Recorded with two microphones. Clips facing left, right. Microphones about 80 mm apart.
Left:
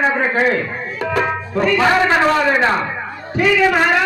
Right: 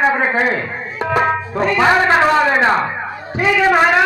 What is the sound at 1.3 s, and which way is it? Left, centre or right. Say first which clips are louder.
Speech: even; right.